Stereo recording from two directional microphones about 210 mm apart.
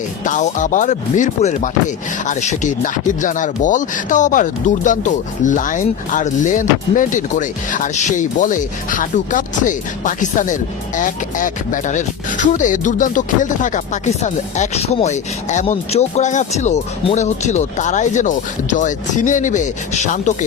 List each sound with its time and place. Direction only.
0.3 s speech: 40° left (ahead or behind)